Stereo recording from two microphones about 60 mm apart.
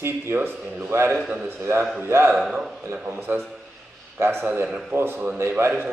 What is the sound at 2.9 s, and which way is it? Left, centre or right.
A man's voice, right.